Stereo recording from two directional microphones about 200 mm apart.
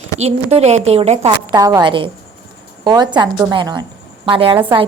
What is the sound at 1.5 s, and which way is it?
A woman's voice, 15° right (ahead or behind).